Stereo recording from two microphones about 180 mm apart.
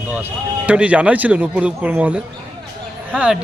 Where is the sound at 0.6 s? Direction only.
5° right (ahead or behind).